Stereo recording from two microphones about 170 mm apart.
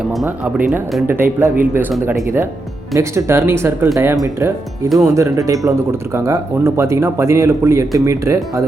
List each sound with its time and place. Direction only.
0.3 s speech: 10° right (ahead or behind)